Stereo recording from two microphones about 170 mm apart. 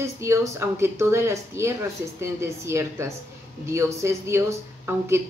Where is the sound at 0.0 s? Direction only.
15° right (ahead or behind).